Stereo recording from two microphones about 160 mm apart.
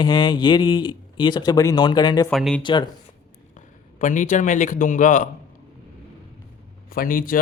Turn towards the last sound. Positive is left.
turn(degrees=60)  # may be behind; listen again after turning